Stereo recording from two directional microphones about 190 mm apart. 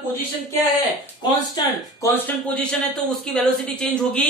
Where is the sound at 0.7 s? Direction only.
20° left (ahead or behind).